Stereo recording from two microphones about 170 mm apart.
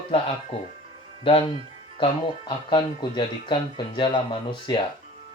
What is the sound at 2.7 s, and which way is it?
Speech, 25° left (ahead or behind).